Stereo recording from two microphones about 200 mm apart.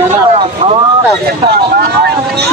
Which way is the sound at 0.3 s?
30° right (ahead or behind).